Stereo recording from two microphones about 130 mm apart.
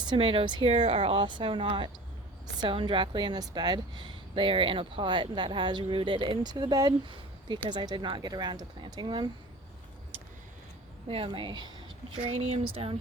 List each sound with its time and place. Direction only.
0.0 s a woman's voice: 40° right (ahead or behind)
11.1 s a woman's voice: 40° right (ahead or behind)
12.2 s speech: 45° right (ahead or behind)